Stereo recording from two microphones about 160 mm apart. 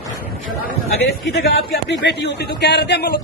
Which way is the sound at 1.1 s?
85° left.